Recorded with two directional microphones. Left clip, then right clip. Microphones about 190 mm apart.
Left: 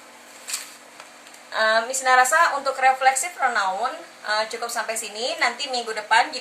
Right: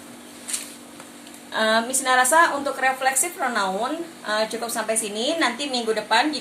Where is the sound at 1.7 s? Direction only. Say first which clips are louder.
Left 2 dB; 20° right (ahead or behind).